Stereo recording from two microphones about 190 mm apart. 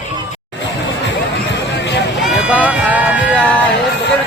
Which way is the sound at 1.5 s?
65° left (ahead or behind).